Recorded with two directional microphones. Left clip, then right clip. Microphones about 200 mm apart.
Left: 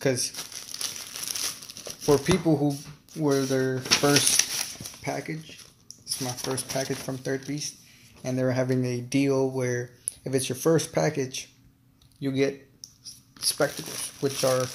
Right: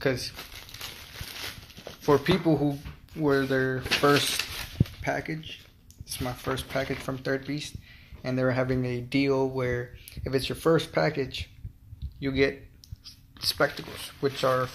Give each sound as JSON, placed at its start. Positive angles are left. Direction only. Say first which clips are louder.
{"t": 0.0, "sound": "crumpling", "louder": "left 2 dB", "side_deg": 25}
{"t": 2.0, "sound": "speech", "louder": "left 1 dB", "side_deg": 10}
{"t": 9.3, "sound": "speech", "louder": "left 1 dB", "side_deg": 5}
{"t": 9.6, "sound": "speech", "louder": "left 1 dB", "side_deg": 20}